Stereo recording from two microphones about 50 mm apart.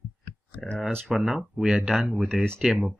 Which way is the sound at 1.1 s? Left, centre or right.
Centre.